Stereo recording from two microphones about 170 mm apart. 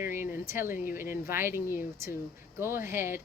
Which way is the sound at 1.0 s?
15° right (ahead or behind).